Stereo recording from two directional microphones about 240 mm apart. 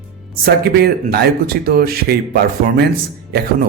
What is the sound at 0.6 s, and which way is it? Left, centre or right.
Speech, right.